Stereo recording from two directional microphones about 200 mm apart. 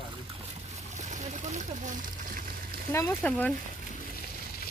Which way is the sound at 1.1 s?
35° right (ahead or behind).